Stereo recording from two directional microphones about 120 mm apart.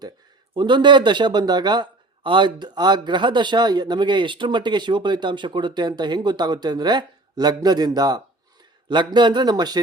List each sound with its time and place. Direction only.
0.5 s a man's voice: 40° right (ahead or behind)